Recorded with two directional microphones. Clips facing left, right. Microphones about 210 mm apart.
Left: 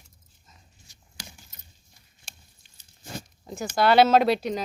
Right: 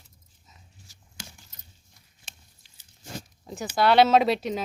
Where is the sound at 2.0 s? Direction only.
Centre (ahead or behind).